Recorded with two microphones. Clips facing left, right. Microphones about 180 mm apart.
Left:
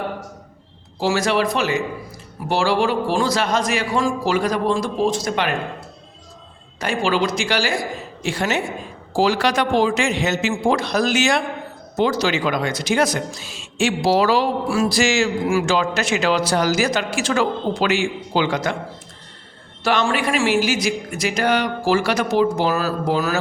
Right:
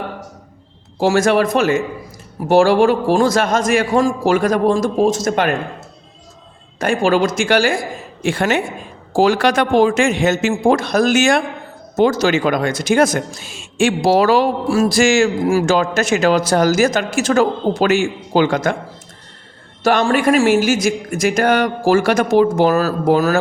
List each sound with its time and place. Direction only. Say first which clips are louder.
0.9 s speech: right 5 dB; 50° right (ahead or behind)
6.7 s speech: right 5 dB; 50° right (ahead or behind)
19.8 s speech: right 5 dB; 45° right (ahead or behind)